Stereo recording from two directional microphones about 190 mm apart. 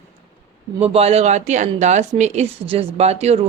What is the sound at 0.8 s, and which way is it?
A woman's voice, 30° right (ahead or behind).